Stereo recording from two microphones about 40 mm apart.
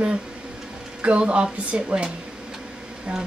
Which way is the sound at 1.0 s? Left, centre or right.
Right.